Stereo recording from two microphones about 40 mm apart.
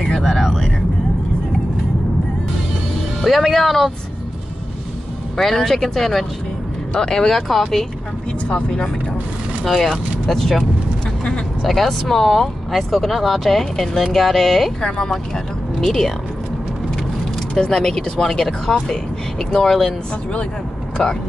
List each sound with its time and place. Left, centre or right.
0.0 s vehicle: centre
3.2 s speech: centre
5.4 s speech: centre
6.9 s speech: centre
10.2 s speech: centre
11.6 s speech: centre
17.6 s speech: centre
21.0 s speech: centre